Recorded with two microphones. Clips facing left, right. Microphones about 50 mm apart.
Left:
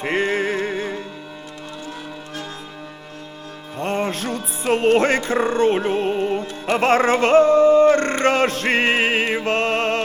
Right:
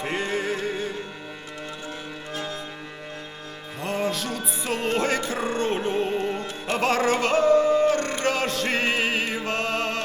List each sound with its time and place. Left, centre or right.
0.0 s music: left
3.8 s music: left